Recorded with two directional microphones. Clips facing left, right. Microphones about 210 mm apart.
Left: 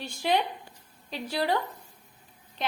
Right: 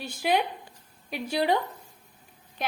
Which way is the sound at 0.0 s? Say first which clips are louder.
Right 1 dB; 10° right (ahead or behind).